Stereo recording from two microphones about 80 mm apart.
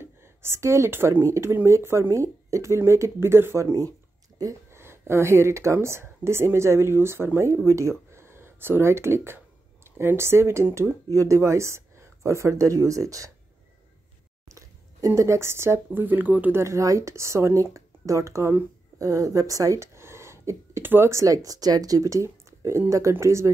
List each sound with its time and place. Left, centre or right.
0.0 s speech: right
4.4 s a sound: right
4.8 s speech: right
14.5 s speech: right
16.6 s speech: right